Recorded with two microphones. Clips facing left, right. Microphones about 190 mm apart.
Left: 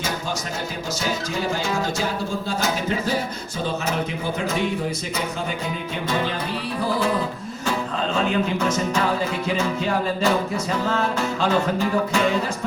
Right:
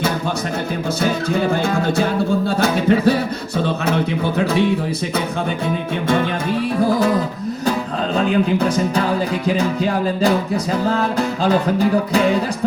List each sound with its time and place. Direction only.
1.0 s music: 55° right (ahead or behind)
6.7 s music: 40° right (ahead or behind)
8.1 s speech: 35° right (ahead or behind)
9.6 s music: 35° right (ahead or behind)